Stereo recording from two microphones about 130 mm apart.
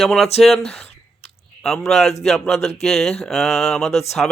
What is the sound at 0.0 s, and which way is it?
Speech, centre (ahead or behind).